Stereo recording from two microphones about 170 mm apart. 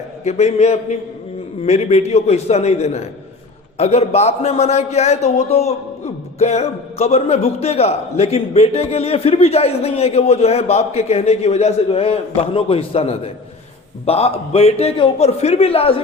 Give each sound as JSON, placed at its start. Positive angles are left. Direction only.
{"t": 0.3, "sound": "a man's voice", "side_deg": 40}